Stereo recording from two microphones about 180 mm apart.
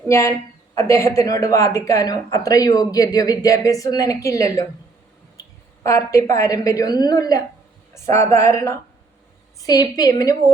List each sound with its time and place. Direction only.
0.1 s a woman's voice: 15° left (ahead or behind)